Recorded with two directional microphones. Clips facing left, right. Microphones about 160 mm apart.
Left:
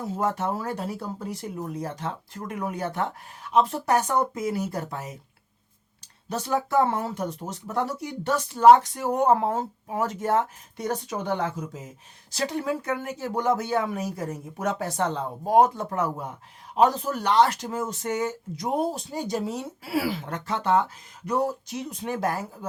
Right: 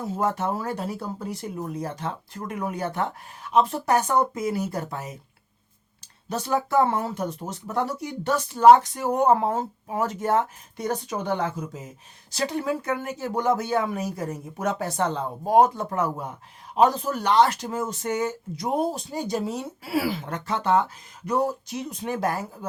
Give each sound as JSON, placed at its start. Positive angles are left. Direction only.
{"t": 0.0, "sound": "speech", "side_deg": -20}
{"t": 6.3, "sound": "speech", "side_deg": -15}
{"t": 16.7, "sound": "speech", "side_deg": -15}
{"t": 17.7, "sound": "speech", "side_deg": -20}
{"t": 18.7, "sound": "speech", "side_deg": -25}
{"t": 19.3, "sound": "speech", "side_deg": -15}